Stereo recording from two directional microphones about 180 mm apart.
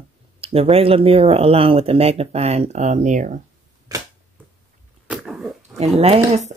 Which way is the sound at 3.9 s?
20° right (ahead or behind).